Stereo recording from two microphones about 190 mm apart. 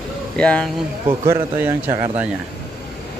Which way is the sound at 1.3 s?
10° right (ahead or behind).